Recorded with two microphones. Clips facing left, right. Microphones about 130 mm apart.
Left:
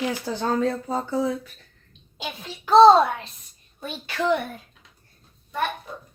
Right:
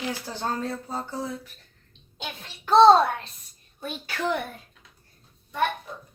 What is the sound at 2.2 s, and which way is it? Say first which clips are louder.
Speech: left 4 dB; 5° left (ahead or behind).